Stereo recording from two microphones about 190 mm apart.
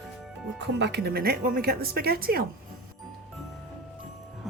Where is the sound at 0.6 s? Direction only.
60° right (ahead or behind).